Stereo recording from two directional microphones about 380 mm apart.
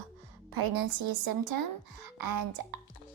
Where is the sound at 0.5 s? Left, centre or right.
Right.